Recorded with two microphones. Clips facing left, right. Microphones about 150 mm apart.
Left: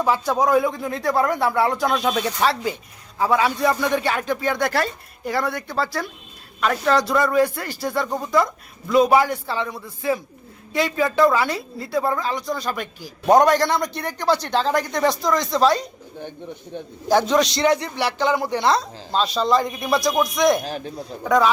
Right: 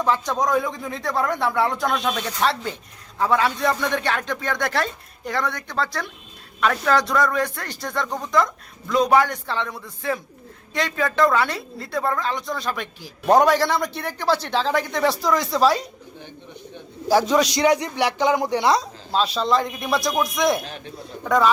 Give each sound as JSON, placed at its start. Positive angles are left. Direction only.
{"t": 0.0, "sound": "a man's voice", "side_deg": 5}
{"t": 17.1, "sound": "a man's voice", "side_deg": -5}
{"t": 19.1, "sound": "a man's voice", "side_deg": 0}
{"t": 20.7, "sound": "speech", "side_deg": 35}
{"t": 21.2, "sound": "a man's voice", "side_deg": 0}